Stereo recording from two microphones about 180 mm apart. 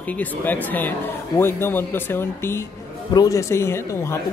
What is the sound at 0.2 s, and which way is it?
Speech, 10° left (ahead or behind).